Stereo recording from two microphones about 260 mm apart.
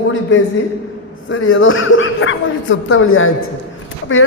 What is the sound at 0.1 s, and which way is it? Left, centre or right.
A man's voice, left.